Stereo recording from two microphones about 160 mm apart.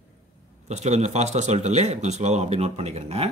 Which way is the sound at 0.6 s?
45° right (ahead or behind).